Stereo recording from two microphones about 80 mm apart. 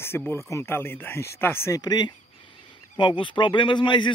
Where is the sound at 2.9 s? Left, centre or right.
Left.